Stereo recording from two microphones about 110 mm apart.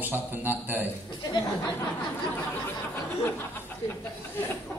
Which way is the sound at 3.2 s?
20° left (ahead or behind).